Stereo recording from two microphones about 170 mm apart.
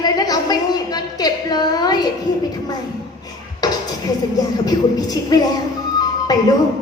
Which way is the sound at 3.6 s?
25° left (ahead or behind).